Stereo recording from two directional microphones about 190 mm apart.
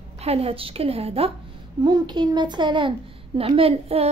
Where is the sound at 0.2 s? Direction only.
30° right (ahead or behind).